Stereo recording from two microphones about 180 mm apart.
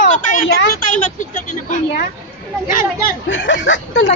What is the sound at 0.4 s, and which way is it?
Speech, 90° left.